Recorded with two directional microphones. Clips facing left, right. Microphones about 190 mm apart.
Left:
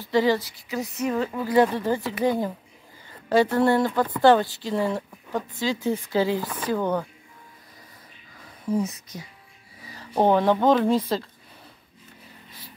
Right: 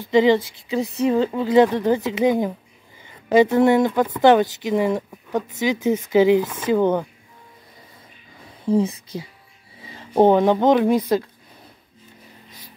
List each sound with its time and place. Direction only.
0.1 s speech: 20° right (ahead or behind)
8.6 s speech: 30° right (ahead or behind); by 11.2 s 15° right (ahead or behind)